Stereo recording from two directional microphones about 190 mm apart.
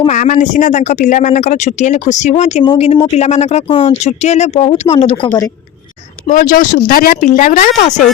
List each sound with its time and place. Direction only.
0.1 s speech: 40° left (ahead or behind)
6.2 s speech: 45° left (ahead or behind)